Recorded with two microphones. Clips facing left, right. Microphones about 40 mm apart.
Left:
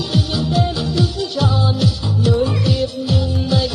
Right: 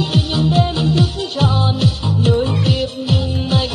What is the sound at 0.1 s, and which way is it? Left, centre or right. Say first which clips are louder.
Music: left 1 dB; right.